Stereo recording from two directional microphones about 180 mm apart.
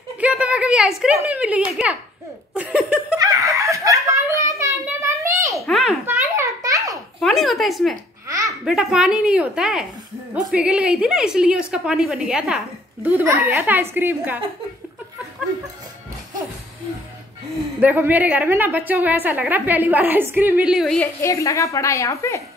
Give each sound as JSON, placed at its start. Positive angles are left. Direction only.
{"t": 0.2, "sound": "a woman's voice", "side_deg": -5}
{"t": 2.5, "sound": "a sound", "side_deg": -5}
{"t": 3.2, "sound": "giggle", "side_deg": -20}
{"t": 5.7, "sound": "a sound", "side_deg": 0}
{"t": 6.0, "sound": "a sound", "side_deg": -15}
{"t": 7.2, "sound": "speech", "side_deg": 0}
{"t": 8.3, "sound": "baby laughter", "side_deg": -20}
{"t": 8.6, "sound": "a woman's voice", "side_deg": 0}
{"t": 17.7, "sound": "a woman's voice", "side_deg": -10}
{"t": 21.2, "sound": "a woman's voice", "side_deg": 15}